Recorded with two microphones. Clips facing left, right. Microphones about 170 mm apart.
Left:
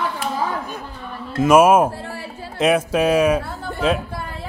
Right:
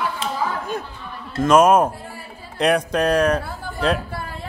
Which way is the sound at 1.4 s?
5° left (ahead or behind).